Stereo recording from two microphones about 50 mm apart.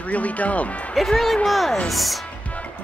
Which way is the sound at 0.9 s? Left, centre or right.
Centre.